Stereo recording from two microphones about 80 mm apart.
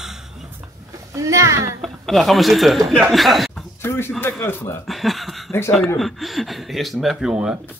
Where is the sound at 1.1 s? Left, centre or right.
Right.